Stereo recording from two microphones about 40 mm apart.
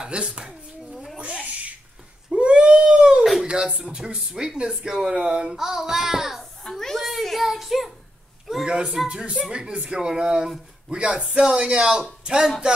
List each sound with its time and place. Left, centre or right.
0.0 s speech: right
0.5 s dishes: centre
1.2 s a sound: right
2.3 s baby cry: right
3.4 s a child's voice: right; by 6.4 s centre
6.7 s a child's voice: centre
7.1 s child singing: centre
8.5 s a sound: centre
9.1 s speech: right